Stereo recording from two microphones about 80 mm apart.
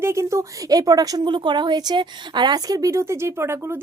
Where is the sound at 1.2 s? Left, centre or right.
Right.